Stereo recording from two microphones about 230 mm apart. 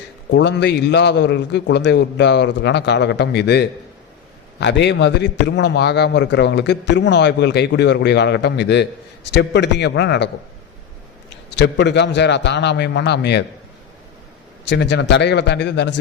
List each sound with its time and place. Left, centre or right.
0.3 s a man's voice: left
11.5 s a man's voice: left
14.6 s a man's voice: left